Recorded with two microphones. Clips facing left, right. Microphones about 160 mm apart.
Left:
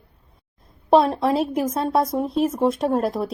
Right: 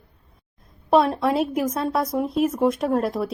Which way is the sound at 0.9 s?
25° left (ahead or behind).